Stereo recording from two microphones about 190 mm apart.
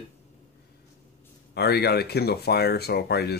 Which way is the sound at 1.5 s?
60° left (ahead or behind).